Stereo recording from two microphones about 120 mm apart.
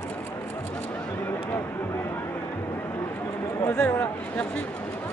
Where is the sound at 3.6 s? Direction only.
20° left (ahead or behind).